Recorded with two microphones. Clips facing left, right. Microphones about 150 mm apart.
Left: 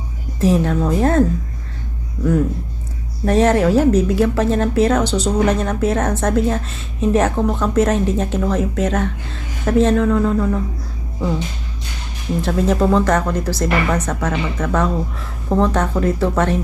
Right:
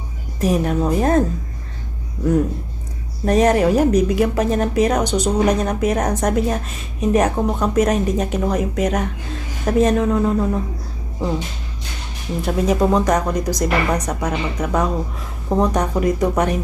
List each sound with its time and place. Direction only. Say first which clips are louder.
0.3 s speech: left 2 dB; 15° right (ahead or behind)
3.2 s speech: left 1 dB; 15° right (ahead or behind)
12.5 s speech: even; 15° right (ahead or behind)